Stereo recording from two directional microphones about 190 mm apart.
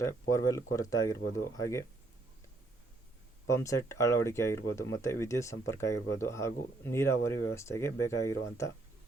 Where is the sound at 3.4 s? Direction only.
15° left (ahead or behind).